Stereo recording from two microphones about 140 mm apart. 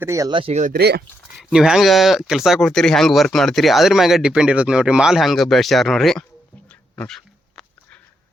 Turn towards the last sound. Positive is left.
turn(degrees=5)  # may be behind; listen again after turning